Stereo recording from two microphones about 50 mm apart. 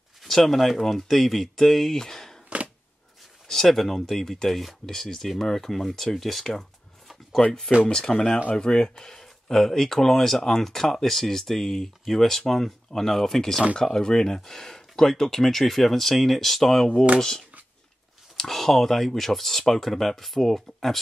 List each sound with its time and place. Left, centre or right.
0.2 s speech: centre
3.4 s speech: centre
7.4 s speech: centre
18.3 s speech: centre